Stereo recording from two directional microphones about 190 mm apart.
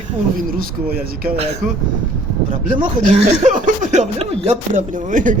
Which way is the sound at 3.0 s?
40° right (ahead or behind).